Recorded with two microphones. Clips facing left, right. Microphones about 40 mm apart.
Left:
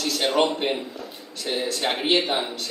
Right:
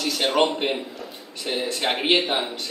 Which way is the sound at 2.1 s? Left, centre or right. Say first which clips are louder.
Left 1 dB; centre.